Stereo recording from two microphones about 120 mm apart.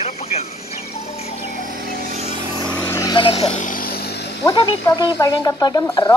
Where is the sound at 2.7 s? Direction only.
20° left (ahead or behind).